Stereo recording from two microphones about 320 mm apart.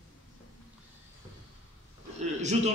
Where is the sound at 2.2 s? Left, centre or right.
Right.